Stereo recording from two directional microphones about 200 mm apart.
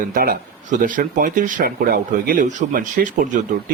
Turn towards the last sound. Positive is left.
turn(degrees=-40)  # may be behind; listen again after turning